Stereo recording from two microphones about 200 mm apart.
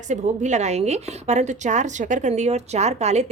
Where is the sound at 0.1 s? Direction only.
35° right (ahead or behind).